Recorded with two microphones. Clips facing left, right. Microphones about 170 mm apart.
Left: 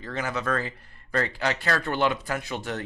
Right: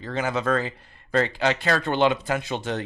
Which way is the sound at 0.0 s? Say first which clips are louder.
Right 4 dB; 25° right (ahead or behind).